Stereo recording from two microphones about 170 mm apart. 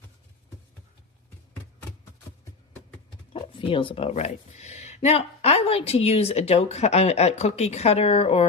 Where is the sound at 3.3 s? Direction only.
30° left (ahead or behind).